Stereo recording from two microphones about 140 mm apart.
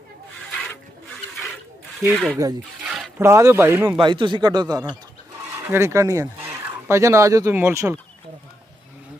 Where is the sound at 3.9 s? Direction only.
35° right (ahead or behind).